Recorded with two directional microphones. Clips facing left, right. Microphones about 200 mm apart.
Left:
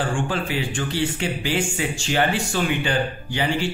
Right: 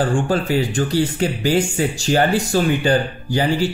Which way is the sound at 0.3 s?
40° right (ahead or behind).